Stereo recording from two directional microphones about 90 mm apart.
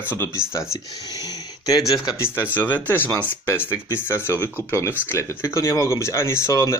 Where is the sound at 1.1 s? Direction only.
45° left (ahead or behind).